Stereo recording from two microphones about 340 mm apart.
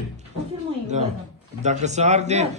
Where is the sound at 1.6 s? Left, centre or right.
Centre.